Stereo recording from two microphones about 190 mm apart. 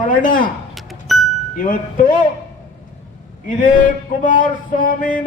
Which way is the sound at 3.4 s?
45° left (ahead or behind).